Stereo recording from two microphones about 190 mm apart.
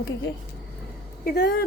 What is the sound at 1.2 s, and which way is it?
Speech, 60° left (ahead or behind).